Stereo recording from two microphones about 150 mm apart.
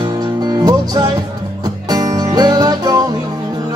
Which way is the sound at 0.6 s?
25° right (ahead or behind).